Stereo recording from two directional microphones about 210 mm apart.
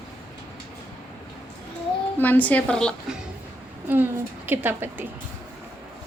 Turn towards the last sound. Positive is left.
turn(degrees=-10)  # may be behind; listen again after turning